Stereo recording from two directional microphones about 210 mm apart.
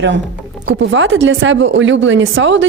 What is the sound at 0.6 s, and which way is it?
Speech, 65° right (ahead or behind).